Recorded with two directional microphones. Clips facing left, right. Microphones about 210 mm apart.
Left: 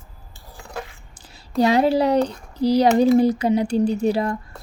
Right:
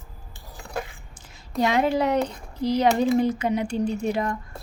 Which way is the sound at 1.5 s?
35° left (ahead or behind).